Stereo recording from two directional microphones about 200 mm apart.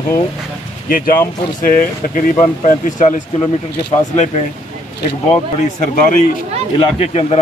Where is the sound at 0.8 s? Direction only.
45° left (ahead or behind).